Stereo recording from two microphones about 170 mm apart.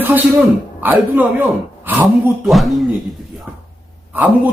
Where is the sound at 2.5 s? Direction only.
Centre (ahead or behind).